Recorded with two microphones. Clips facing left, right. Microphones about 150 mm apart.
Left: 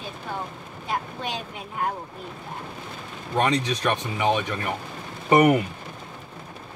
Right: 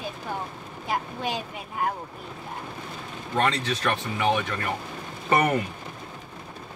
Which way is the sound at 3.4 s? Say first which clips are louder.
Left 2 dB; 15° left (ahead or behind).